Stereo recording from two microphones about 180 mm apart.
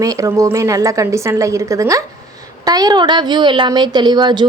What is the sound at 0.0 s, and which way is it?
A woman's voice, 20° right (ahead or behind).